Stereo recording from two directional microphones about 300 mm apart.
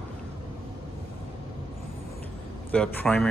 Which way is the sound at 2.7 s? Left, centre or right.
Centre.